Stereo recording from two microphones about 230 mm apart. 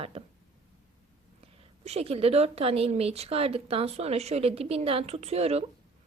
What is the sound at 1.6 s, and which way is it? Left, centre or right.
A woman's voice, right.